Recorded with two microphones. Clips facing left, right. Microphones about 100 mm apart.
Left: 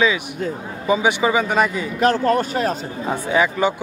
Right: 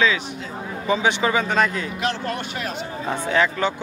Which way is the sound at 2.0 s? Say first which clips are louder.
Left 11 dB; 45° left (ahead or behind).